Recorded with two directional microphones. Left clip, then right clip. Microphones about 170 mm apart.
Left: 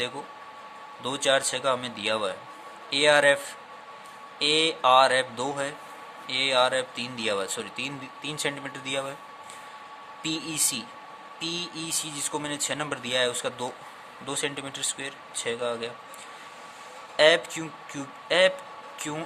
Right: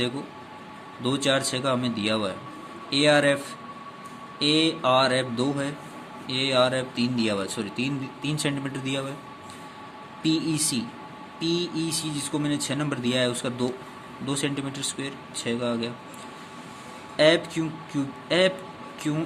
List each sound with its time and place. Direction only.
1.0 s speech: 25° left (ahead or behind)
10.2 s speech: 25° left (ahead or behind)
17.2 s speech: 25° left (ahead or behind)